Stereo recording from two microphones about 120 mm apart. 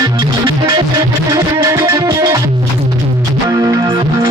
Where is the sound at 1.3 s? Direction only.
25° right (ahead or behind).